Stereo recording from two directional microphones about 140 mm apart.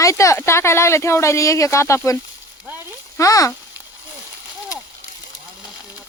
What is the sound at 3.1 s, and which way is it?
Speech, 25° left (ahead or behind).